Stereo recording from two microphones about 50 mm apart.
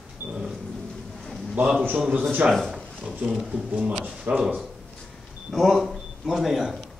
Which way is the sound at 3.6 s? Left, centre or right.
Right.